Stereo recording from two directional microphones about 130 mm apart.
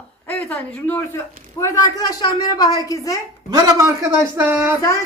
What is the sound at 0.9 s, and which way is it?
A man's voice, 25° left (ahead or behind).